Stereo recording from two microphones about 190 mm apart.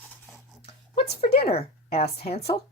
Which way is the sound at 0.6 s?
30° left (ahead or behind).